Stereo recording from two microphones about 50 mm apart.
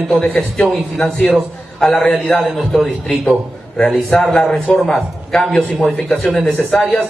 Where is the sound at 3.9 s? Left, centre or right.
Centre.